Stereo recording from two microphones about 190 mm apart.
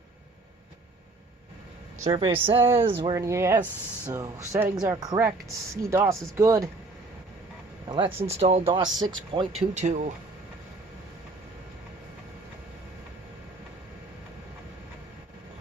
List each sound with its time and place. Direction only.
2.0 s speech: 30° right (ahead or behind)
7.9 s speech: 25° right (ahead or behind)
9.6 s speech: 40° right (ahead or behind)